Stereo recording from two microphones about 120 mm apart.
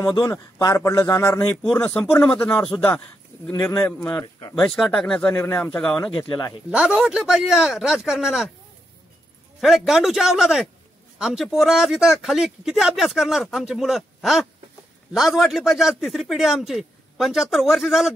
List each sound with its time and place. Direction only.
0.0 s a man's voice: 35° left (ahead or behind)
1.7 s a man's voice: 15° left (ahead or behind)
4.6 s speech: 5° left (ahead or behind)
6.7 s speech: 10° right (ahead or behind)
9.6 s speech: 5° right (ahead or behind)